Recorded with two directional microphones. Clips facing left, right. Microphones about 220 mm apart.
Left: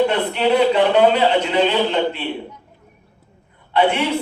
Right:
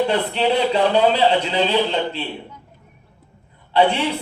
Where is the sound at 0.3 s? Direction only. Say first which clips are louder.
Left 4 dB; 30° right (ahead or behind).